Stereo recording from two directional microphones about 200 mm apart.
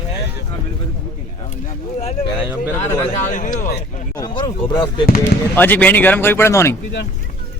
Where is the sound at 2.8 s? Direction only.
40° left (ahead or behind).